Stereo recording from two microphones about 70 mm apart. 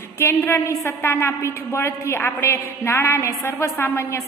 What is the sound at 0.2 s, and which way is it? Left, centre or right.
A woman's voice, left.